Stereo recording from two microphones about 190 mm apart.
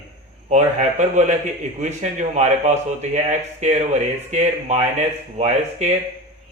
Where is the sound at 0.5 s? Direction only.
40° right (ahead or behind).